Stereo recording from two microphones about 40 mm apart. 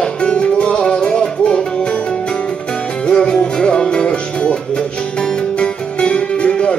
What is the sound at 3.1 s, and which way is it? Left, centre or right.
Music, left.